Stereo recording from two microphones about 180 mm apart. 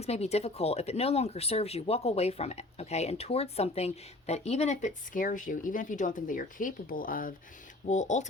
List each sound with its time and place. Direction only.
0.0 s speech: 35° left (ahead or behind)